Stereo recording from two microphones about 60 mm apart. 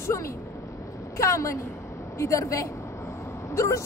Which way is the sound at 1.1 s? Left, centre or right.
Left.